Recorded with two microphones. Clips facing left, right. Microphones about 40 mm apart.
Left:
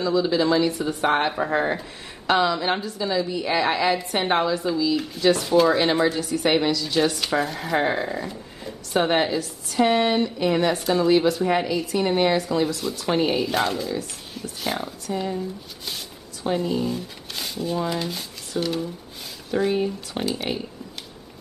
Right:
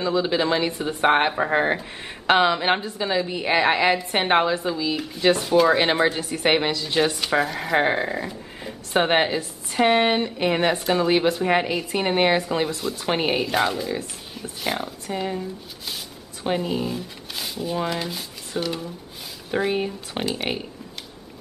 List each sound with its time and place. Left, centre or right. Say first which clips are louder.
0.0 s a woman's voice: left 1 dB; right
4.9 s speech: even; centre; by 6.2 s right
6.2 s a woman's voice: even; right
7.0 s speech: right 2 dB; centre
7.7 s speech: right 2 dB; centre
8.9 s a woman's voice: right 1 dB; right
13.5 s speech: right 1 dB; centre
15.1 s a woman's voice: left 1 dB; right
16.5 s a woman's voice: left 1 dB; centre
16.8 s speech: left 1 dB; centre
19.5 s a woman's voice: left 1 dB; right